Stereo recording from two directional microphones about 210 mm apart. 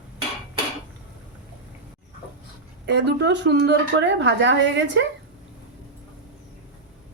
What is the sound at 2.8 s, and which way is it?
A woman's voice, 55° right (ahead or behind).